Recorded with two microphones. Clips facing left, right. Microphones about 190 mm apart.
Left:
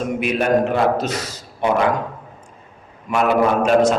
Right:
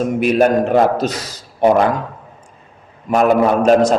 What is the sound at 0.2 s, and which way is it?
A man's voice, 40° right (ahead or behind).